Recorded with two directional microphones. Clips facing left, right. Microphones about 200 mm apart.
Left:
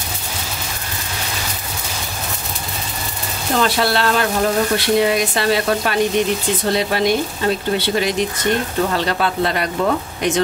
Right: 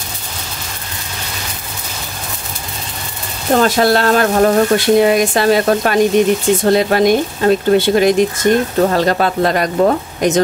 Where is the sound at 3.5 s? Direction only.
45° right (ahead or behind).